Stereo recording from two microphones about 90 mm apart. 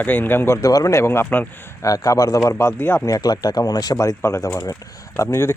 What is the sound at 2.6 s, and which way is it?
Speech, 25° left (ahead or behind).